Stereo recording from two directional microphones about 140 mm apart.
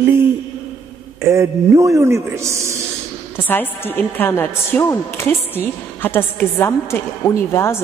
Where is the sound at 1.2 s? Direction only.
20° right (ahead or behind).